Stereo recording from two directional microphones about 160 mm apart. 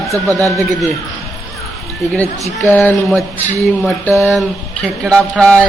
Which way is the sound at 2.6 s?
10° left (ahead or behind).